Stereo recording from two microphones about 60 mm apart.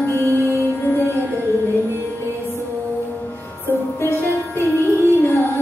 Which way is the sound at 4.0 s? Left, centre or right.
Left.